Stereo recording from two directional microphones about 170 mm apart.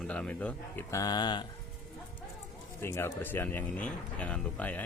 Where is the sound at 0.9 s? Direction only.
25° left (ahead or behind).